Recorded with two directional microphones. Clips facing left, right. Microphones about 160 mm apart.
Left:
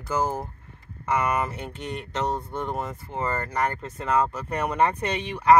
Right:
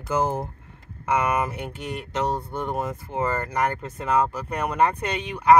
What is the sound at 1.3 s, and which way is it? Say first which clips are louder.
Speech: right 2 dB; 10° right (ahead or behind).